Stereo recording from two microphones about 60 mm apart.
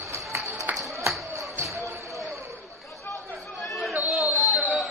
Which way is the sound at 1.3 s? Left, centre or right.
Right.